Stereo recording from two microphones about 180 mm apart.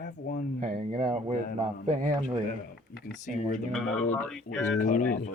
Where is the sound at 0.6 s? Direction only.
45° right (ahead or behind).